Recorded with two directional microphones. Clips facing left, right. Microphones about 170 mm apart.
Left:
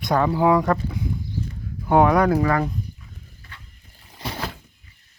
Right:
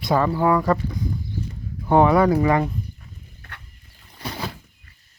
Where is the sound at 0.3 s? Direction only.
15° left (ahead or behind).